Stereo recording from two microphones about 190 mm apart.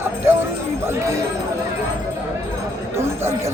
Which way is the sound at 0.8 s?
15° right (ahead or behind).